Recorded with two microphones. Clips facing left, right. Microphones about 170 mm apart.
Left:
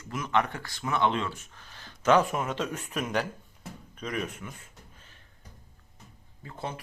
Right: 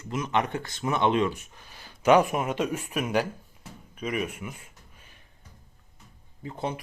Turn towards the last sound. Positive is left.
turn(degrees=-20)  # may be behind; listen again after turning